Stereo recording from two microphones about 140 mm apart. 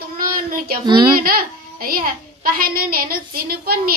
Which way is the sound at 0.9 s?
35° right (ahead or behind).